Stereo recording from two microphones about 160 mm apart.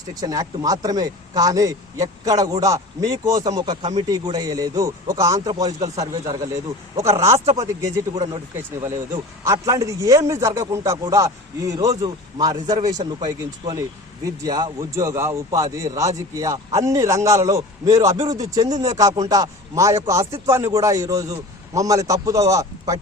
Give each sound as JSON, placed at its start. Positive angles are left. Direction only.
{"t": 0.1, "sound": "a man's voice", "side_deg": -25}